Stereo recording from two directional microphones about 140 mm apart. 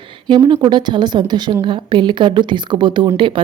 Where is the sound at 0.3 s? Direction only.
35° right (ahead or behind).